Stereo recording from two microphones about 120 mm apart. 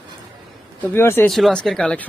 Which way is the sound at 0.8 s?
20° left (ahead or behind).